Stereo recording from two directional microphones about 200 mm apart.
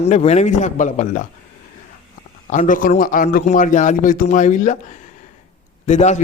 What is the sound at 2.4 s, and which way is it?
A man's voice, 40° left (ahead or behind).